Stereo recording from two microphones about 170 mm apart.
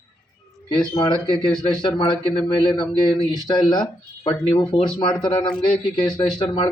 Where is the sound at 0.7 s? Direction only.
25° left (ahead or behind).